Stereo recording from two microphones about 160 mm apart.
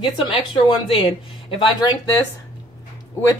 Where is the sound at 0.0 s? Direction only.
30° left (ahead or behind).